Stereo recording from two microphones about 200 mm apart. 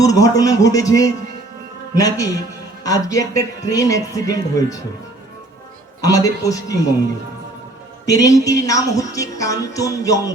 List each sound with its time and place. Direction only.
0.0 s music: 15° left (ahead or behind)
6.0 s music: 15° left (ahead or behind)
8.0 s music: 15° left (ahead or behind)